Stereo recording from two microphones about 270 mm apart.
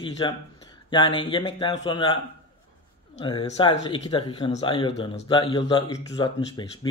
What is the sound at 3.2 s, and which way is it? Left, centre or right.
Speech, centre.